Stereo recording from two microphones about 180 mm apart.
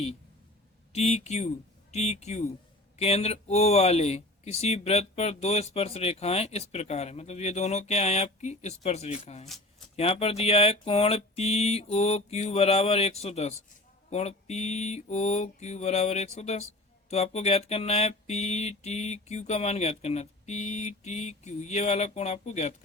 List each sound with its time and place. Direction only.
0.9 s speech: 35° left (ahead or behind)